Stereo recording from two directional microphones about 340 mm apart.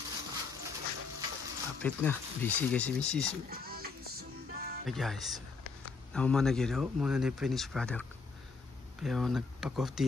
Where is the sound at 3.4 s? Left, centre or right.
Right.